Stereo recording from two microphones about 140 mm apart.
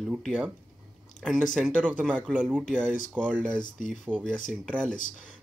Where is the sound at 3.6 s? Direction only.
70° left (ahead or behind).